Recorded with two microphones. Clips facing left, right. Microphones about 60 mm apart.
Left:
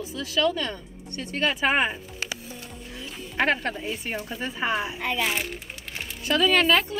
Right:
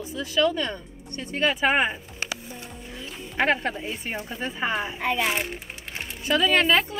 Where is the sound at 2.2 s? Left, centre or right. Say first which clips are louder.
Right 1 dB; right.